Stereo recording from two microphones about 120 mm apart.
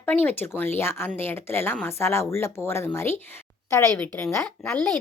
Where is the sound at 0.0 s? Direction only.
15° left (ahead or behind).